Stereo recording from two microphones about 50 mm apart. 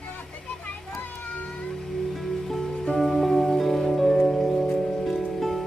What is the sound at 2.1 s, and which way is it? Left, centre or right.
Music, centre.